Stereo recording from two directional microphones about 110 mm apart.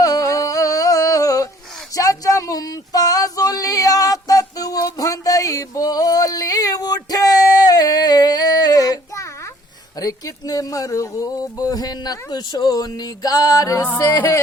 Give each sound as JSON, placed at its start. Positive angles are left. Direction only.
{"t": 0.0, "sound": "a sound", "side_deg": 30}
{"t": 10.0, "sound": "speech", "side_deg": 35}
{"t": 14.0, "sound": "music", "side_deg": 30}